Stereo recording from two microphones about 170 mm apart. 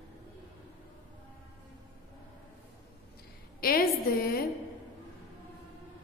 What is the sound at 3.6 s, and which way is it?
Speech, 60° left (ahead or behind).